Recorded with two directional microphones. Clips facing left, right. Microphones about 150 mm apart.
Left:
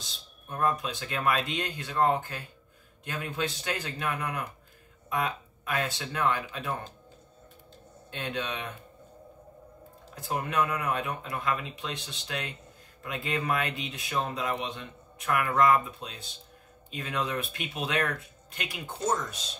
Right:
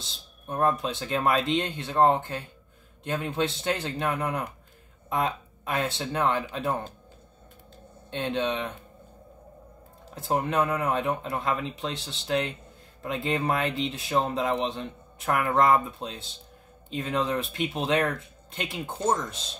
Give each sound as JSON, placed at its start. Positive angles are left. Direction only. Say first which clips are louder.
{"t": 0.0, "sound": "speech", "louder": "right 4 dB", "side_deg": -30}
{"t": 8.1, "sound": "speech", "louder": "right 6 dB", "side_deg": -25}
{"t": 10.2, "sound": "speech", "louder": "right 4 dB", "side_deg": -30}